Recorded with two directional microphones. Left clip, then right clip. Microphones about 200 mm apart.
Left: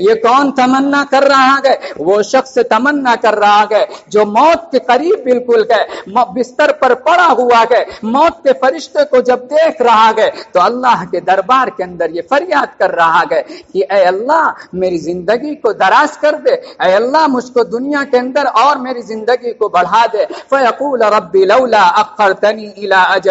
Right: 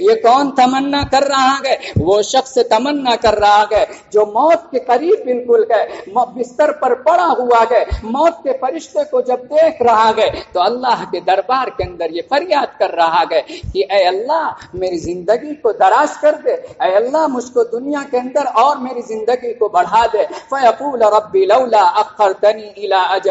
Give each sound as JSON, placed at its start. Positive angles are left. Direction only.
{"t": 0.0, "sound": "a man's voice", "side_deg": 20}